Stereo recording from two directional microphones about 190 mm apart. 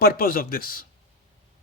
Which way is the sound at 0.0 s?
50° left (ahead or behind).